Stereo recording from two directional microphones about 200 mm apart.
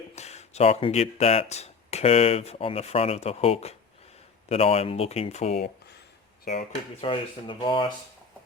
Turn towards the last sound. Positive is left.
turn(degrees=25)  # may be behind; listen again after turning